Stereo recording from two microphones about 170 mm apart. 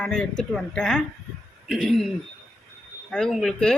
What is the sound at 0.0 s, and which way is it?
Speech, 5° left (ahead or behind).